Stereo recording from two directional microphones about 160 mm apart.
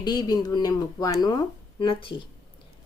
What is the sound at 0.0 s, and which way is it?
Speech, 25° left (ahead or behind).